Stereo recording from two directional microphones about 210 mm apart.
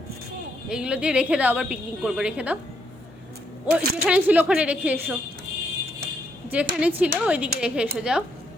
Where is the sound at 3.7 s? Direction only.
5° right (ahead or behind).